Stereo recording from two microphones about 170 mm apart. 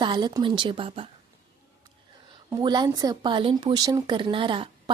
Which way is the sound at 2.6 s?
25° right (ahead or behind).